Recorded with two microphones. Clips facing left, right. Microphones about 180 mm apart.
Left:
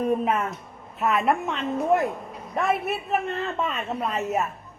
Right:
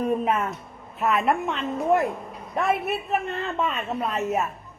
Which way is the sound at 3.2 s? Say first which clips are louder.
Left 1 dB; 35° left (ahead or behind).